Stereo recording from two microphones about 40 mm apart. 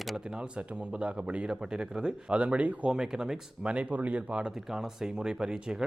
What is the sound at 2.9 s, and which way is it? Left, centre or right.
Speech, centre.